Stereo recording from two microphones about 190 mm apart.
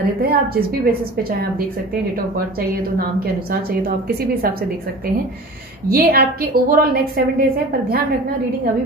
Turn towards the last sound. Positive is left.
turn(degrees=-50)  # may be behind; listen again after turning